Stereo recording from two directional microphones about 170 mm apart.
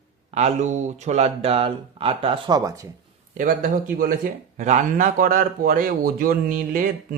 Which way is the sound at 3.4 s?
50° right (ahead or behind).